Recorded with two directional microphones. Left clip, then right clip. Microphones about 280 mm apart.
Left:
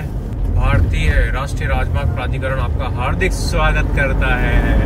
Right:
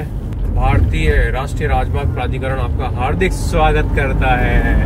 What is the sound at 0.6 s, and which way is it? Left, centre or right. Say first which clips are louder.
Speech: right 3 dB; centre.